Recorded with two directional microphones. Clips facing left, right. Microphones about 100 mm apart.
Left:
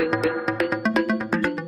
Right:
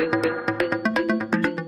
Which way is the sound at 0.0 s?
Centre (ahead or behind).